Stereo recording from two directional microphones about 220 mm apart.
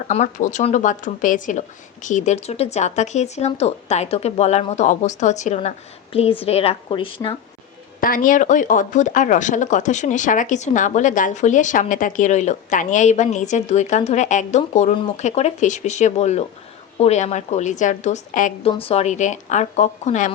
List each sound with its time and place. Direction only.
0.1 s a woman's voice: 35° left (ahead or behind)
8.0 s speech: 40° left (ahead or behind)